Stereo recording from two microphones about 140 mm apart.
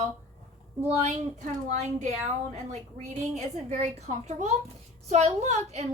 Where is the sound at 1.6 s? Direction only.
60° right (ahead or behind).